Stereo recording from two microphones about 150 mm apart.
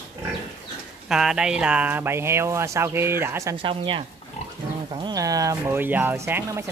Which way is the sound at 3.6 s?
35° right (ahead or behind).